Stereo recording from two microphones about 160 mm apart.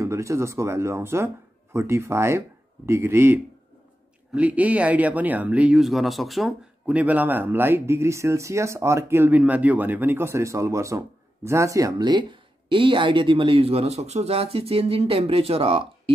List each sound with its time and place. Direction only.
0.0 s speech: 20° right (ahead or behind); by 15.8 s 35° right (ahead or behind)